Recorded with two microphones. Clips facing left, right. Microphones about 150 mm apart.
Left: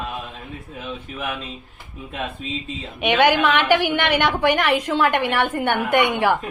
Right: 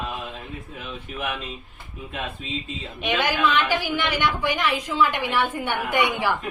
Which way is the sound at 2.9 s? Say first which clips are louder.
Left 7 dB; 65° left (ahead or behind).